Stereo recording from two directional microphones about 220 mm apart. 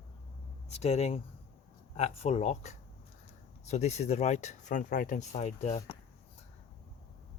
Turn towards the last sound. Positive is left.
turn(degrees=30)  # may be behind; listen again after turning